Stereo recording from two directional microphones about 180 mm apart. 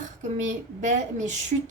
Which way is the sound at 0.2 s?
40° right (ahead or behind).